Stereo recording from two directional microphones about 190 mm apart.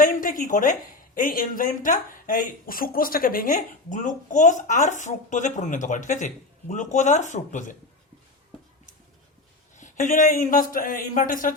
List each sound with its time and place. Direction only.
0.0 s a woman's voice: 45° left (ahead or behind)
9.7 s speech: 40° left (ahead or behind)